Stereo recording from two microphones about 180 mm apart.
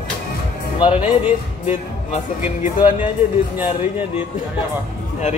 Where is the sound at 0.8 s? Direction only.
30° left (ahead or behind).